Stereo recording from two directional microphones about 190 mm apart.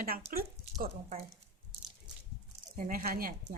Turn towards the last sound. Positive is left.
turn(degrees=-45)  # may be behind; listen again after turning